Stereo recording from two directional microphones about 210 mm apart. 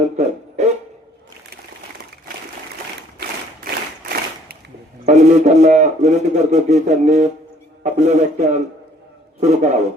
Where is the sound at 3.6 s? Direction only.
45° right (ahead or behind).